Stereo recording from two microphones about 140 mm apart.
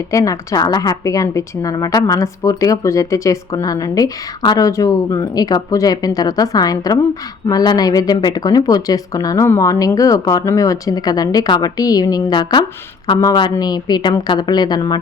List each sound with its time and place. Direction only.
0.1 s a woman's voice: 25° left (ahead or behind)